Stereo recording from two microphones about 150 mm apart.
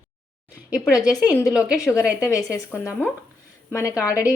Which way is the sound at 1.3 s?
20° left (ahead or behind).